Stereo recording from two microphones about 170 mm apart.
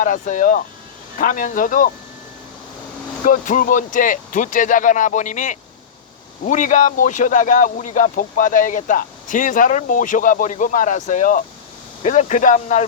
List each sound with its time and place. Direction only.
0.0 s speech: 50° left (ahead or behind)
3.2 s speech: 50° left (ahead or behind)